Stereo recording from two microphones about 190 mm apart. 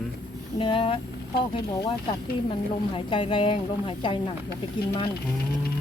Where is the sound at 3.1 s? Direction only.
25° left (ahead or behind).